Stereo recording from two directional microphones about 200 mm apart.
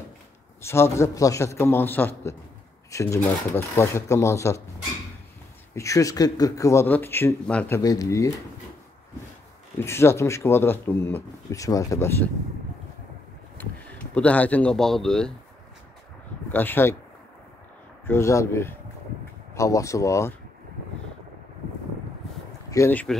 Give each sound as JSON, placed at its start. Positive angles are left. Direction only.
{"t": 0.6, "sound": "speech", "side_deg": 15}
{"t": 5.8, "sound": "speech", "side_deg": 15}
{"t": 9.8, "sound": "speech", "side_deg": 10}
{"t": 13.6, "sound": "speech", "side_deg": 10}
{"t": 16.5, "sound": "speech", "side_deg": 10}
{"t": 18.0, "sound": "speech", "side_deg": 15}
{"t": 22.7, "sound": "speech", "side_deg": 10}